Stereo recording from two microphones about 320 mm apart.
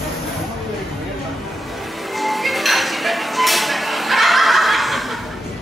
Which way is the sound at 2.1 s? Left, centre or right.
Centre.